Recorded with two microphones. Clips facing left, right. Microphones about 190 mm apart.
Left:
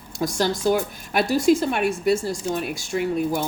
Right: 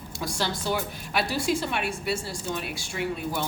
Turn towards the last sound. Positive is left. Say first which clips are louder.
# left 7 dB
turn(degrees=45)  # may be behind; listen again after turning